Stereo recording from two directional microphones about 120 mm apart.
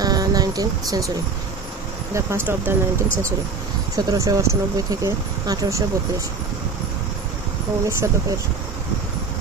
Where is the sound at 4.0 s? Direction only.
30° right (ahead or behind).